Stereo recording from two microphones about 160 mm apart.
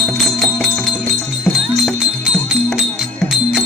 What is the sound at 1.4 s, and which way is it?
Music, centre (ahead or behind).